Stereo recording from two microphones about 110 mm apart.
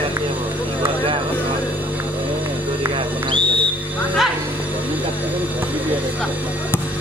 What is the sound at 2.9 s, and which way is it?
Owl, 50° right (ahead or behind).